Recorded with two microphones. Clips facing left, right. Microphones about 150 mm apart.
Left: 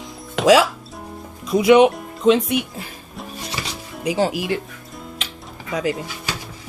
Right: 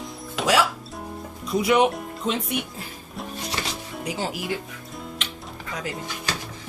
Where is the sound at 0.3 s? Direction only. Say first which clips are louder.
Left 9 dB; 90° left.